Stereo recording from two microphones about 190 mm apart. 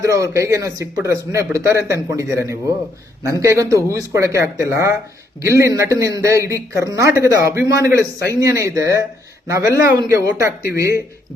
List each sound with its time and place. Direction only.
0.0 s speech: 15° right (ahead or behind)